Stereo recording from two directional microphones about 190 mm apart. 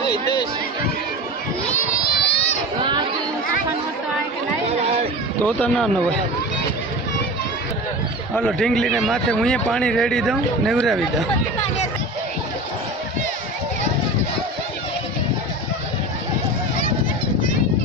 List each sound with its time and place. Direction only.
2.1 s a sound: 60° left (ahead or behind)
5.5 s speech: 5° left (ahead or behind)
8.4 s speech: 5° left (ahead or behind)